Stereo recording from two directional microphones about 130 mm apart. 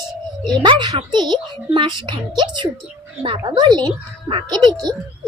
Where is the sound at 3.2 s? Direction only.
45° right (ahead or behind).